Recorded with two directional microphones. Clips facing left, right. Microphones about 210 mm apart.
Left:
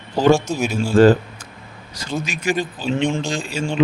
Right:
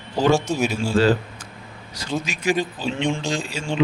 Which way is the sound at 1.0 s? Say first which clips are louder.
Left 7 dB; 50° left (ahead or behind).